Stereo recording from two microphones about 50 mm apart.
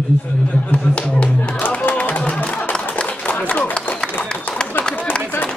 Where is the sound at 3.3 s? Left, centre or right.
Left.